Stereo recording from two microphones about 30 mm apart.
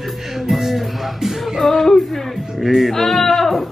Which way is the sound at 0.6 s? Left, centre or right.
Centre.